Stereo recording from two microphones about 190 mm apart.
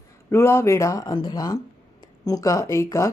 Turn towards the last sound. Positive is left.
turn(degrees=15)  # may be behind; listen again after turning